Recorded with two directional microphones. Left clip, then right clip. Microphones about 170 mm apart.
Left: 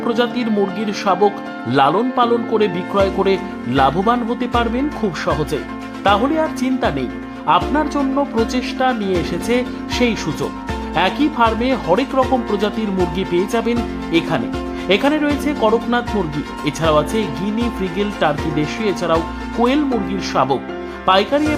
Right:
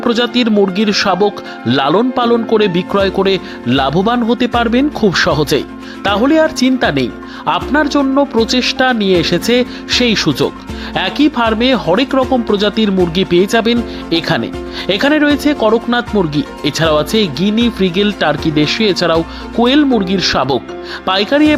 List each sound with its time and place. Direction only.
0.0 s speech: 25° right (ahead or behind)